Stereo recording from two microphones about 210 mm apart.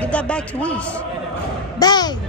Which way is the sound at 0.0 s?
5° left (ahead or behind).